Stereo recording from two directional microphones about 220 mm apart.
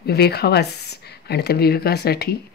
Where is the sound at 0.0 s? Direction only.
45° left (ahead or behind).